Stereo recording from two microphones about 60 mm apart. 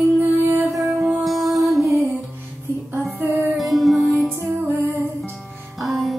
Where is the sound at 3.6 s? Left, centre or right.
Centre.